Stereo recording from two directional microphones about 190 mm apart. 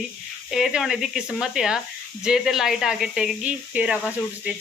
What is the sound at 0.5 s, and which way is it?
Speech, 5° right (ahead or behind).